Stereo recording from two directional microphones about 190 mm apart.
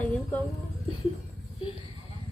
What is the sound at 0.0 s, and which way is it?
Music, 5° left (ahead or behind).